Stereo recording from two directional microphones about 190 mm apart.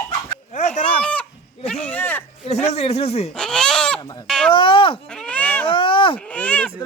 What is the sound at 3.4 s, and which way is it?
Speech, 5° left (ahead or behind).